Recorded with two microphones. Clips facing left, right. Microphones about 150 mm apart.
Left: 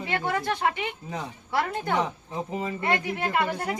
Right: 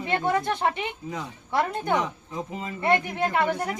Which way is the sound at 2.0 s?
30° left (ahead or behind).